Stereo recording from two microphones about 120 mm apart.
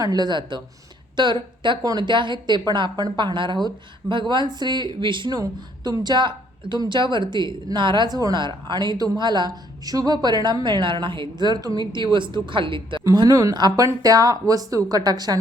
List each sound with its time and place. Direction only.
0.0 s a woman's voice: 35° right (ahead or behind)
13.1 s a woman's voice: 30° right (ahead or behind)